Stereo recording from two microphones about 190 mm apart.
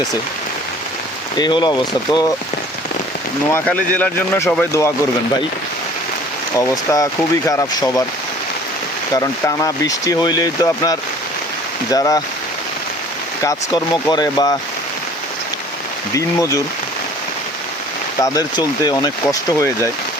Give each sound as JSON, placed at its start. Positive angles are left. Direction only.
{"t": 1.4, "sound": "speech", "side_deg": 25}
{"t": 3.5, "sound": "speech", "side_deg": 10}
{"t": 6.6, "sound": "speech", "side_deg": 15}
{"t": 9.1, "sound": "speech", "side_deg": 20}
{"t": 13.4, "sound": "speech", "side_deg": 20}
{"t": 16.1, "sound": "speech", "side_deg": 15}
{"t": 18.2, "sound": "speech", "side_deg": 20}